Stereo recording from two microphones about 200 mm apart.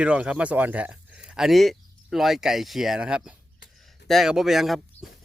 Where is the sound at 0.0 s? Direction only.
5° right (ahead or behind).